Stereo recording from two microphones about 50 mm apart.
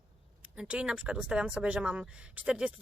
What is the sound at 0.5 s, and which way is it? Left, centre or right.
Speech, centre.